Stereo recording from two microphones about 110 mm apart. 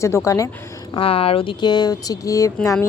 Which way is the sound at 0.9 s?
60° left (ahead or behind).